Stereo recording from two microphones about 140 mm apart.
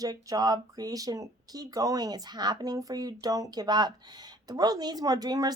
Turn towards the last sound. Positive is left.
turn(degrees=-30)  # may be behind; listen again after turning